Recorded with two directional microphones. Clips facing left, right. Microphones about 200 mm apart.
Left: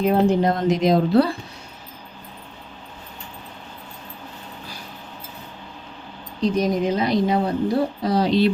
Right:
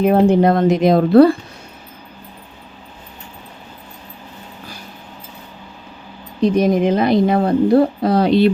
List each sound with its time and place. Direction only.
0.0 s a woman's voice: 60° right (ahead or behind)
6.4 s a woman's voice: 55° right (ahead or behind)